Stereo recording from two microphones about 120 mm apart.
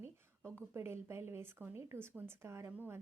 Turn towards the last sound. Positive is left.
turn(degrees=-20)  # may be behind; listen again after turning